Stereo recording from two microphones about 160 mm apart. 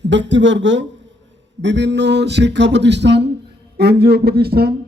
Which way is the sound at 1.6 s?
90° right.